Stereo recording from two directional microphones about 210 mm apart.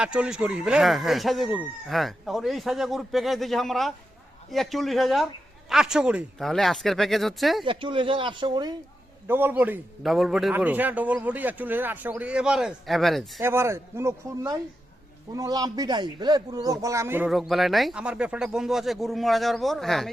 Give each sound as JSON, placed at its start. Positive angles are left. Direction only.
{"t": 0.0, "sound": "speech", "side_deg": -5}
{"t": 7.6, "sound": "a man's voice", "side_deg": -25}
{"t": 9.2, "sound": "a man's voice", "side_deg": -10}
{"t": 13.4, "sound": "a man's voice", "side_deg": -10}